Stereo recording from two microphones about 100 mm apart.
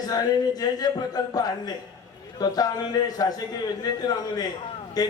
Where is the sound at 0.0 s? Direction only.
40° left (ahead or behind).